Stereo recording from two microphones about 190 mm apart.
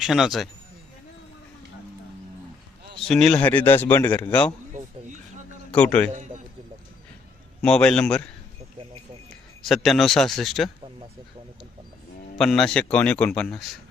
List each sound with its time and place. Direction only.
0.0 s speech: centre (ahead or behind)
3.1 s speech: 5° left (ahead or behind)
4.7 s a sound: 40° right (ahead or behind)
5.7 s speech: 5° left (ahead or behind)
7.6 s speech: 5° left (ahead or behind)
9.6 s speech: centre (ahead or behind)
12.4 s speech: 5° left (ahead or behind)